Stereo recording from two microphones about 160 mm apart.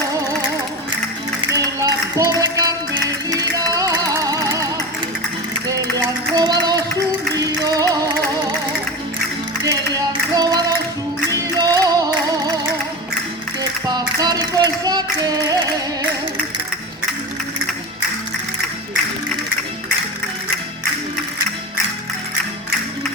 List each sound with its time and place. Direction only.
1.5 s music: 20° right (ahead or behind)
9.9 s music: 25° right (ahead or behind)
13.6 s music: 25° right (ahead or behind)